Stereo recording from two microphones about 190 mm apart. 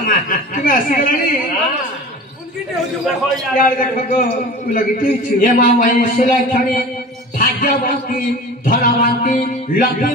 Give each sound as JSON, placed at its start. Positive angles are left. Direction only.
{"t": 0.0, "sound": "a man's voice", "side_deg": 45}
{"t": 3.5, "sound": "a man's voice", "side_deg": 45}
{"t": 7.3, "sound": "music", "side_deg": 45}
{"t": 8.6, "sound": "a man's voice", "side_deg": 45}